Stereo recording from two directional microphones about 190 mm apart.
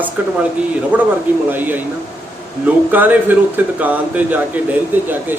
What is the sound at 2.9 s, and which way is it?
Speech, 10° right (ahead or behind).